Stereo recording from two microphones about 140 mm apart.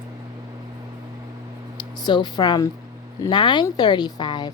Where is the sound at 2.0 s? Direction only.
30° left (ahead or behind).